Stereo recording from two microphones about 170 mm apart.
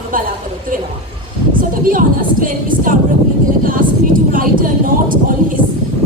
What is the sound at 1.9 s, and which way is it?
A woman's voice, 55° right (ahead or behind).